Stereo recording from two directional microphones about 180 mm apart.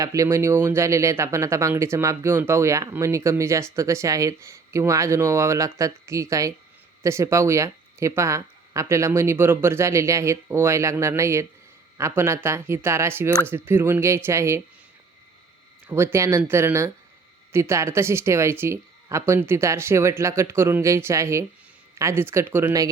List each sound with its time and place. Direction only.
0.0 s speech: 15° right (ahead or behind)
15.9 s speech: 15° right (ahead or behind)